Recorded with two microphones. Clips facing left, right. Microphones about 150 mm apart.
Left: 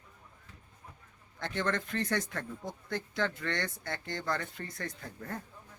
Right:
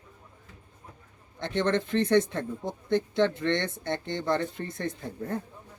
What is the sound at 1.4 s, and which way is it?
Speech, 20° right (ahead or behind).